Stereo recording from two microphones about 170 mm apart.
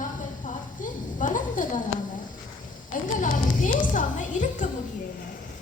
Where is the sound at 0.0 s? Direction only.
50° left (ahead or behind).